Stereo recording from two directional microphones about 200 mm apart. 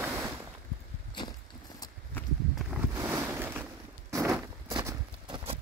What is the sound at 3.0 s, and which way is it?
Boat, 10° right (ahead or behind).